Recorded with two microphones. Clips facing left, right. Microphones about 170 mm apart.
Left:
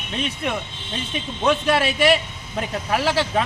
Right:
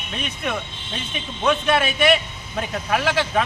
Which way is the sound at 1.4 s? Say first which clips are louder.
Even; 35° left (ahead or behind).